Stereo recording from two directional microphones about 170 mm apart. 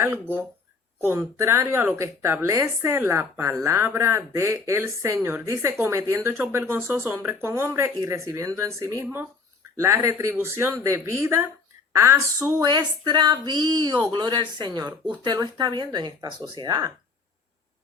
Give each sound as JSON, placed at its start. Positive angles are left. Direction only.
{"t": 0.0, "sound": "speech", "side_deg": -15}